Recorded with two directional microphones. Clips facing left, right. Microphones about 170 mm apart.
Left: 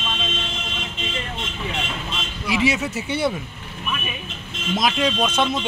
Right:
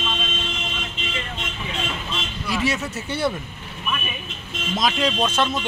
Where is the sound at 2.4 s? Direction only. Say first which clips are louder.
Left 3 dB; 10° left (ahead or behind).